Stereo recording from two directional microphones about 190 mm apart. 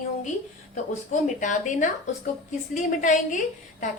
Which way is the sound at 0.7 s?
40° left (ahead or behind).